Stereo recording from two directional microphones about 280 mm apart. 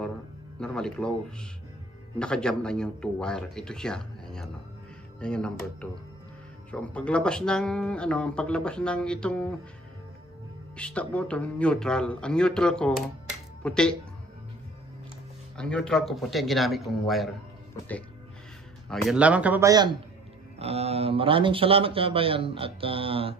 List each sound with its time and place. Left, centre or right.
0.6 s a man's voice: centre
10.8 s a man's voice: centre
13.3 s music: centre
15.5 s a man's voice: centre
18.9 s a man's voice: centre